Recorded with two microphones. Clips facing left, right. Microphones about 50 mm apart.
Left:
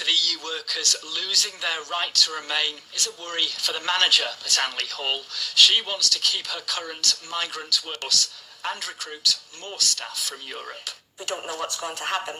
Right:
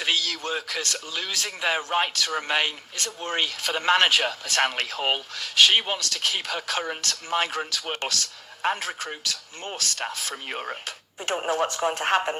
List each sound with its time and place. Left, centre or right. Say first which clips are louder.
0.0 s speech: even; right